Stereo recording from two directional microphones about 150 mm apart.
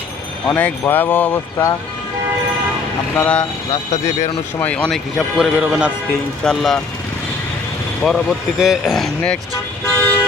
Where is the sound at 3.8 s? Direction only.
50° left (ahead or behind).